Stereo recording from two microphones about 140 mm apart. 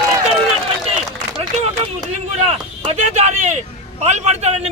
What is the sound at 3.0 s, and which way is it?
A man's voice, 55° right (ahead or behind).